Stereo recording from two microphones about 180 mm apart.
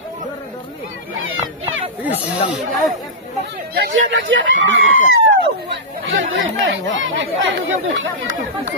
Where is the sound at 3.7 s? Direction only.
75° right (ahead or behind).